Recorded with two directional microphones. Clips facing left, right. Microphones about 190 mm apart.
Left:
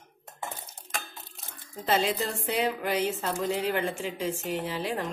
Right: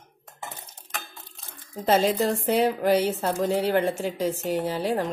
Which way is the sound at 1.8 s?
45° right (ahead or behind).